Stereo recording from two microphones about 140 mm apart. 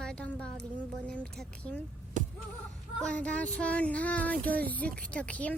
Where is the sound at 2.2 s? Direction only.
60° right (ahead or behind).